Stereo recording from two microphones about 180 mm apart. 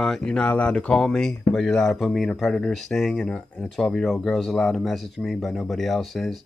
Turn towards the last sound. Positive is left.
turn(degrees=0)  # may be behind; listen again after turning